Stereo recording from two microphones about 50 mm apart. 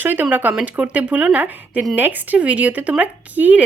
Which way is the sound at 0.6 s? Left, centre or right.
Right.